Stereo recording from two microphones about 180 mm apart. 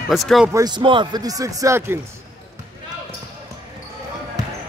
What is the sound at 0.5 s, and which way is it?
A man's voice, 20° right (ahead or behind).